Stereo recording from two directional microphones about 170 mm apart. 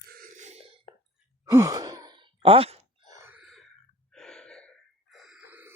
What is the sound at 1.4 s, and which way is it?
Sigh, 15° right (ahead or behind).